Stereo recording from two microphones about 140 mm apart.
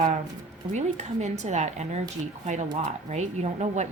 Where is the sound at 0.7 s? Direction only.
55° right (ahead or behind).